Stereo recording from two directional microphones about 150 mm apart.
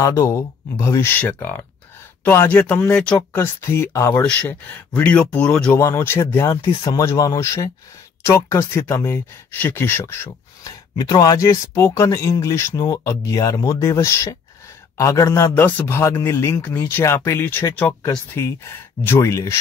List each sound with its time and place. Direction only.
0.0 s a man's voice: 20° left (ahead or behind)
3.3 s a man's voice: 15° left (ahead or behind)